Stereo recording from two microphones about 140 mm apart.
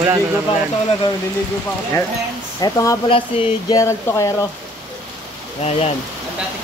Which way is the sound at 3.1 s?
40° left (ahead or behind).